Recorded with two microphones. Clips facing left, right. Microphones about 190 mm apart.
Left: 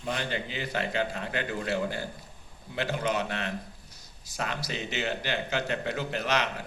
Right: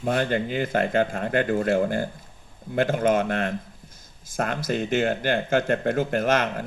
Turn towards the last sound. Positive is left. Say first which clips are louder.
# right 7 dB
turn(degrees=-50)  # may be behind; listen again after turning